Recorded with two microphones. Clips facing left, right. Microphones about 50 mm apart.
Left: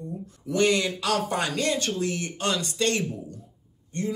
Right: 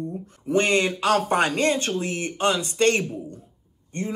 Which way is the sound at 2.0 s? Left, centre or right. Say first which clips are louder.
Right 3 dB; right.